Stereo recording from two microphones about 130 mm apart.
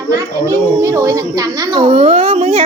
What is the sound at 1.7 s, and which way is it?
Speech, 45° right (ahead or behind).